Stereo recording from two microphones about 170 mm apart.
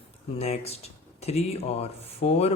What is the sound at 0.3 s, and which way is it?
A man's voice, 40° left (ahead or behind).